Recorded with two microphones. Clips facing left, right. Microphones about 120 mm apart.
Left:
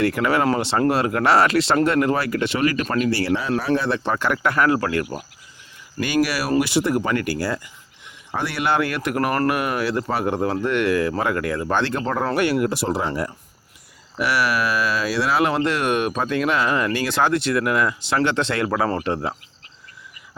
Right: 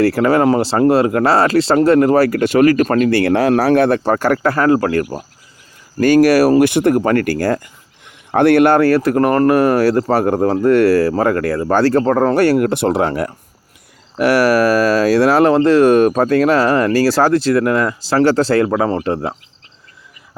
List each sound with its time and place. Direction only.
0.0 s speech: 35° right (ahead or behind); by 3.9 s 65° right (ahead or behind)
3.9 s speech: 45° right (ahead or behind)
6.0 s speech: 45° right (ahead or behind)
12.6 s speech: 60° right (ahead or behind)
14.2 s speech: 45° right (ahead or behind)
18.7 s speech: 20° right (ahead or behind)